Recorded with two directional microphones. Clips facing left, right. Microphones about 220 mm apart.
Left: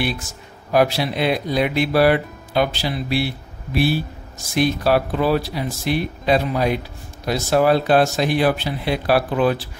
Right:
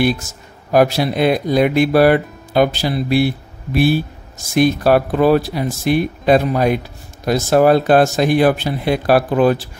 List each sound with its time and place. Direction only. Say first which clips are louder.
0.0 s speech: right 7 dB; 45° right (ahead or behind)